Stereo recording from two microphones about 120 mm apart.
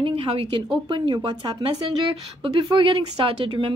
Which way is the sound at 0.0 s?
50° right (ahead or behind).